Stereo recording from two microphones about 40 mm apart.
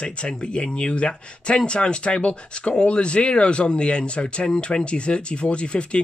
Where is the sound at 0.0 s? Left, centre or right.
Left.